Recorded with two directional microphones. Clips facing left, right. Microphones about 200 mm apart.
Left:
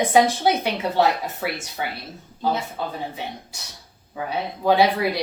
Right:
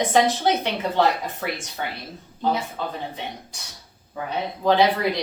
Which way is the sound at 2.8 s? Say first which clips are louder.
Left 1 dB; 5° left (ahead or behind).